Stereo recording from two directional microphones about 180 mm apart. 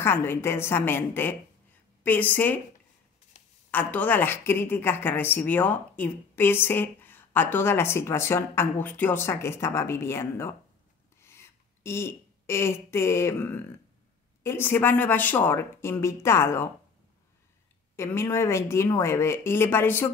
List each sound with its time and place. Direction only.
0.0 s a woman's voice: 10° left (ahead or behind)
3.3 s a sound: 40° left (ahead or behind)
3.7 s a woman's voice: 10° left (ahead or behind)
11.1 s a sound: 15° left (ahead or behind)
14.4 s a woman's voice: 15° left (ahead or behind)
17.9 s a woman's voice: 15° left (ahead or behind)